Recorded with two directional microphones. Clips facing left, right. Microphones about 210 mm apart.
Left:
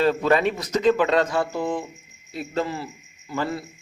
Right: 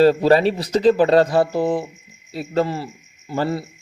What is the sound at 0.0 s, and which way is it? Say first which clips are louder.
A man's voice: right 6 dB; 35° right (ahead or behind).